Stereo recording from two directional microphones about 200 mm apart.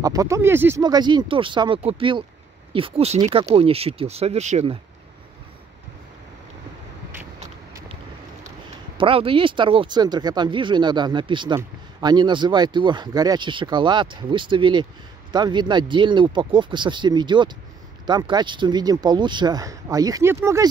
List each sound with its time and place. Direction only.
0.0 s speech: 15° right (ahead or behind); by 4.7 s 35° right (ahead or behind)
8.9 s speech: 25° right (ahead or behind)